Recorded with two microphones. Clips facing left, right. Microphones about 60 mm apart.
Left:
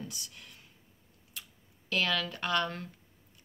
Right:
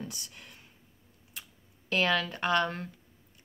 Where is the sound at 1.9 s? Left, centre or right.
Right.